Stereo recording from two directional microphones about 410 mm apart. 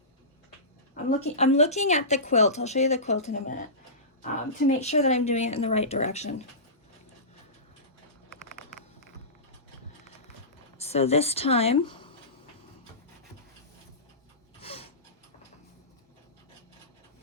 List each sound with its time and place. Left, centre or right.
0.9 s speech: centre
10.8 s speech: centre
14.6 s rub: centre